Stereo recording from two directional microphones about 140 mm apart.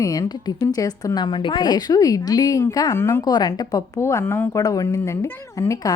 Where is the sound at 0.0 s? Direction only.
25° left (ahead or behind).